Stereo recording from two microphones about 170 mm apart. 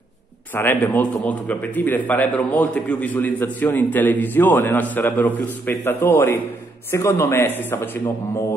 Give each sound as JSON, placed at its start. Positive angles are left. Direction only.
{"t": 0.6, "sound": "a man's voice", "side_deg": 10}